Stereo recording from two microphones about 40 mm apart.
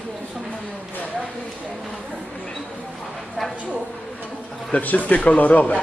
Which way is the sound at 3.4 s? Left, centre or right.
Centre.